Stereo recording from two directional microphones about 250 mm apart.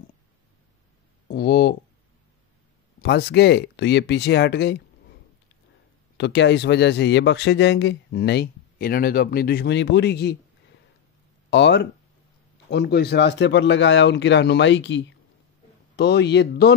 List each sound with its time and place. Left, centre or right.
1.2 s a sound: left
3.0 s speech: left
6.1 s speech: left
11.5 s speech: left